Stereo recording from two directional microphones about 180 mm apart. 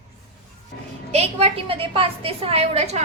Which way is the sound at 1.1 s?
35° right (ahead or behind).